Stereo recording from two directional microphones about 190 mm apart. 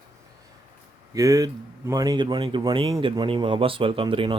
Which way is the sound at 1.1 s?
20° right (ahead or behind).